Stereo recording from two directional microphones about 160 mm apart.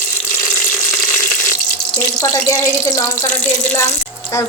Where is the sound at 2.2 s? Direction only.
20° left (ahead or behind).